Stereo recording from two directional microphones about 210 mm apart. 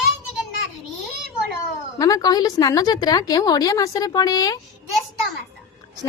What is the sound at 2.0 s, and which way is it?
A woman's voice, 15° left (ahead or behind).